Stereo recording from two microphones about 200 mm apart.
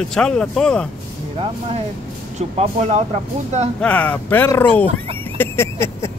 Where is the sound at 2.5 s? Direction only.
35° right (ahead or behind).